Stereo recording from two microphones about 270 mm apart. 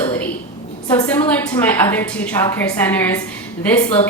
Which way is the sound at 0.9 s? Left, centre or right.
Centre.